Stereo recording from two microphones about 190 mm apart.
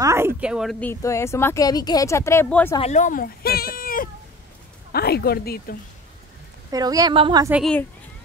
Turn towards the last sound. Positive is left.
turn(degrees=0)  # may be behind; listen again after turning